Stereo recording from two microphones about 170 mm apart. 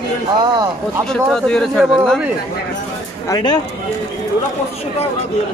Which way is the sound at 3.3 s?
25° left (ahead or behind).